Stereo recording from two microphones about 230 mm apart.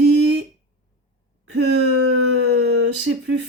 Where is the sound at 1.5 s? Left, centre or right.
Right.